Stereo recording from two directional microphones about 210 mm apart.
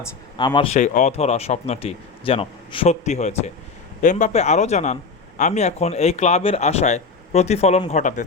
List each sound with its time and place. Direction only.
0.3 s speech: 20° left (ahead or behind)
0.7 s speech: 35° left (ahead or behind)